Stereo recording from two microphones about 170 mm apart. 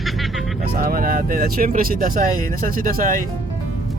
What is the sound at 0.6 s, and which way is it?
Speech, 60° right (ahead or behind).